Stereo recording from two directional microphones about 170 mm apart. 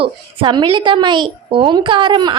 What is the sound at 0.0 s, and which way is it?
A woman's voice, 30° right (ahead or behind).